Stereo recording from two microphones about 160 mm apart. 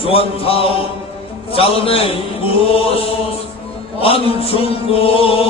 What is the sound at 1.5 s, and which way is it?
Chant, 35° left (ahead or behind).